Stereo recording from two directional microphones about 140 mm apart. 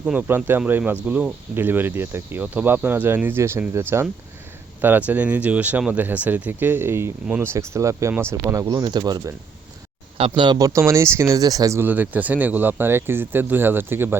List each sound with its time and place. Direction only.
0.0 s speech: 10° right (ahead or behind)
8.6 s speech: 30° right (ahead or behind); by 14.2 s 15° right (ahead or behind)